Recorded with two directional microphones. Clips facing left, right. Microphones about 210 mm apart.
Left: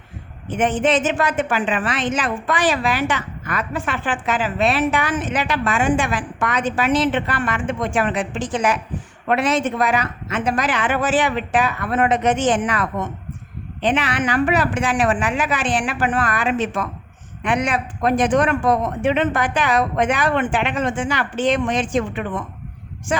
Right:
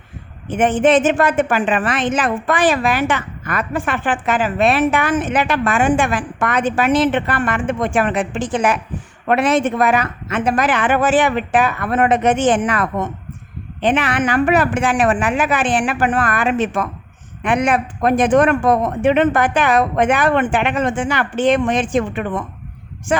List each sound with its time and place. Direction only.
0.5 s a woman's voice: 55° right (ahead or behind)